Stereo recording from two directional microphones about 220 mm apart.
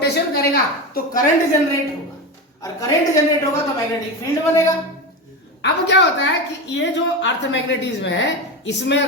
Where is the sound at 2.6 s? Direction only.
15° left (ahead or behind).